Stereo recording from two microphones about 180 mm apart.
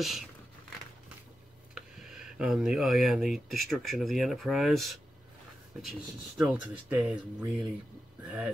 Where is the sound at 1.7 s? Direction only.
5° right (ahead or behind).